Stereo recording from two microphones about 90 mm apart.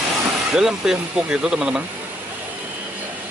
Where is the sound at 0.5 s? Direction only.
5° right (ahead or behind).